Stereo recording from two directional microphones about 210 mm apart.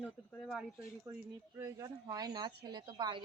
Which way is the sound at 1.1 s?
15° right (ahead or behind).